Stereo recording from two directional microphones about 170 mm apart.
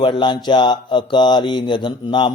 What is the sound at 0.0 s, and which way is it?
Mantra, 30° left (ahead or behind).